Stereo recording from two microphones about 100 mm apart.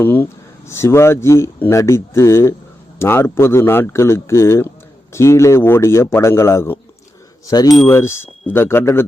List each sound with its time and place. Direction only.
0.0 s a sound: 20° left (ahead or behind)
0.7 s speech: 25° left (ahead or behind)
7.4 s wind chime: 40° left (ahead or behind)
7.9 s speech: 25° left (ahead or behind)